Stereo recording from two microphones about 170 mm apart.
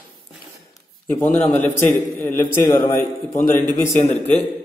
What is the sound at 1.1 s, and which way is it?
A man's voice, 10° left (ahead or behind).